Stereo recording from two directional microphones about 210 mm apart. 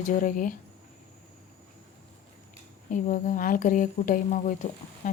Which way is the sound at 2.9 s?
35° left (ahead or behind).